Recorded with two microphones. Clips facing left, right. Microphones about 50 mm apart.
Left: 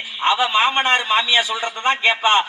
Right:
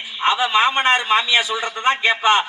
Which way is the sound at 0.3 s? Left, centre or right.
Left.